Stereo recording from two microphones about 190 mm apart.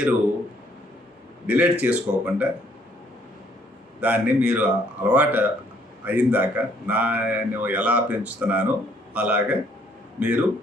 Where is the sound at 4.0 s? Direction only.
10° right (ahead or behind).